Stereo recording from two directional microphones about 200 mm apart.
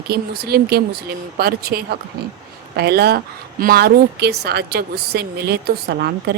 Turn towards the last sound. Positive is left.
turn(degrees=-55)  # may be behind; listen again after turning